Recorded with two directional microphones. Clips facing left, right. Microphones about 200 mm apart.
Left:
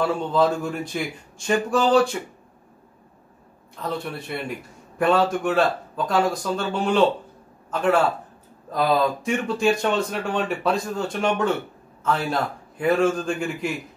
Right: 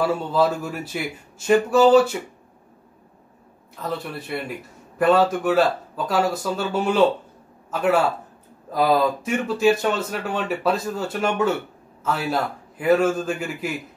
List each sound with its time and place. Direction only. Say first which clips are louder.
0.0 s speech: even; 5° right (ahead or behind)
3.7 s a man's voice: even; 5° right (ahead or behind)